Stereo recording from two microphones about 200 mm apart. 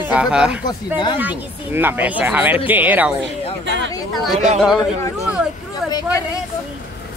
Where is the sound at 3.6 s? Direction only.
65° right (ahead or behind).